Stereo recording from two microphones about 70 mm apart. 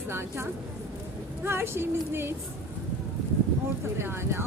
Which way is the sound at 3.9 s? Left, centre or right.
Right.